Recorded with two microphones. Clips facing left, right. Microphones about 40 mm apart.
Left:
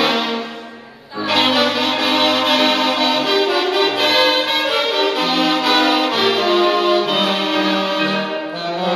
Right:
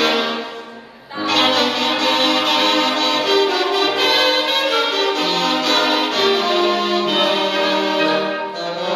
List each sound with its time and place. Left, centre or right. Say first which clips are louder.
1.3 s music: left 1 dB; centre